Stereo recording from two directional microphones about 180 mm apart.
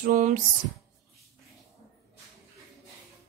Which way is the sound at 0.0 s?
45° right (ahead or behind).